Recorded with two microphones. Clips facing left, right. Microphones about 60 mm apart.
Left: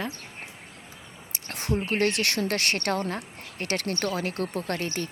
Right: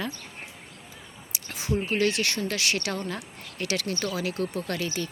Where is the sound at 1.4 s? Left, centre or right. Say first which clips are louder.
Even; left.